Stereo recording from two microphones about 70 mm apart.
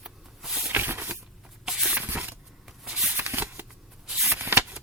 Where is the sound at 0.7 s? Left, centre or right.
Right.